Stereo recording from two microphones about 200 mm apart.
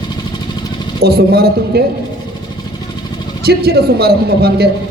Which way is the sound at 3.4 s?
50° right (ahead or behind).